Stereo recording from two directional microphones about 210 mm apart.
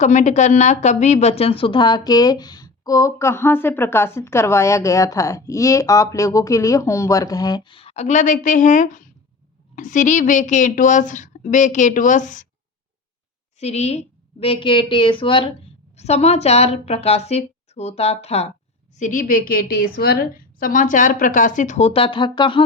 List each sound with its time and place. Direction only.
0.0 s a woman's voice: 35° left (ahead or behind)
13.6 s a woman's voice: 30° left (ahead or behind)